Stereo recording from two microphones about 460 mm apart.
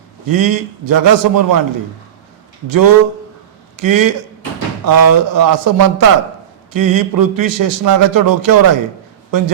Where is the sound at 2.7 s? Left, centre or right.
Right.